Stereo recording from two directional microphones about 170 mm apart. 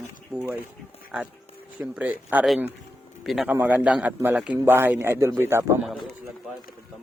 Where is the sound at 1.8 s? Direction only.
10° right (ahead or behind).